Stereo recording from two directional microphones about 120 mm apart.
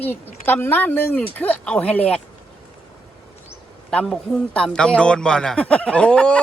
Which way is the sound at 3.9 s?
10° left (ahead or behind).